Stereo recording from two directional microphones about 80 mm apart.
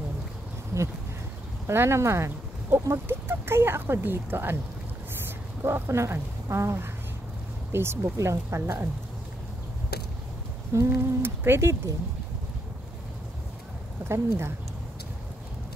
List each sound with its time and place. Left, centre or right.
0.7 s a sound: right
1.7 s speech: right
5.6 s speech: right
10.7 s speech: right
14.0 s speech: right